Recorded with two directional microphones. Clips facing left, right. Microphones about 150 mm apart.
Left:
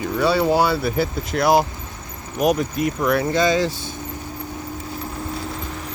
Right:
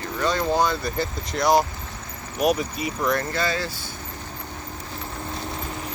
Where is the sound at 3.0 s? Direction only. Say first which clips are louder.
Left 5 dB; 10° left (ahead or behind).